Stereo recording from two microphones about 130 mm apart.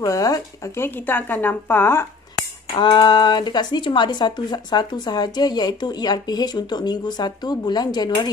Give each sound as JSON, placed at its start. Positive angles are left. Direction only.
{"t": 0.0, "sound": "speech", "side_deg": 25}
{"t": 2.7, "sound": "speech", "side_deg": 35}